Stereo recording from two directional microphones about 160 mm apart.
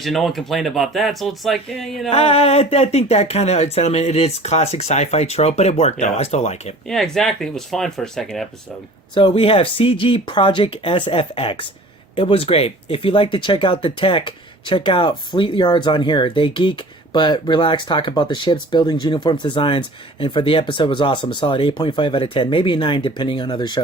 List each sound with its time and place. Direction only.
0.0 s speech: centre (ahead or behind)
2.0 s speech: 40° left (ahead or behind)
6.8 s speech: centre (ahead or behind)
9.1 s speech: 35° left (ahead or behind)